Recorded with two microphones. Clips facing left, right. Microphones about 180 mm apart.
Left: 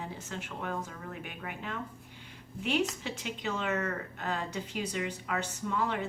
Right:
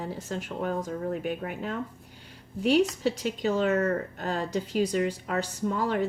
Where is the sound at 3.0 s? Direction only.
40° right (ahead or behind).